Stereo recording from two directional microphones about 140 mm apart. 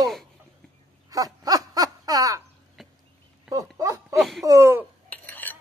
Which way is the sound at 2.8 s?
Centre (ahead or behind).